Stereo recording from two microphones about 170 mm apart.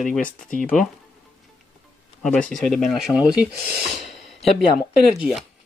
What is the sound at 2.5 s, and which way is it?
Speech, 5° left (ahead or behind).